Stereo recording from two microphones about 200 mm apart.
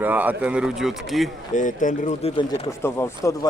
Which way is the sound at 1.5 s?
40° left (ahead or behind).